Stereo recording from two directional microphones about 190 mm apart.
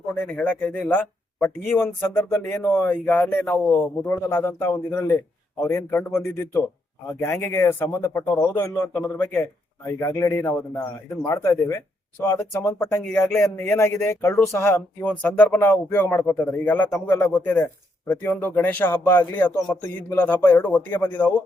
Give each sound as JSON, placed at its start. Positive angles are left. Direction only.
{"t": 0.3, "sound": "speech", "side_deg": 10}